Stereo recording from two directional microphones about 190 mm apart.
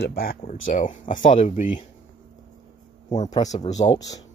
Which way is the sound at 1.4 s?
30° left (ahead or behind).